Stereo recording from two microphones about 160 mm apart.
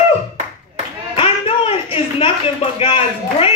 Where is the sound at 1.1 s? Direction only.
35° left (ahead or behind).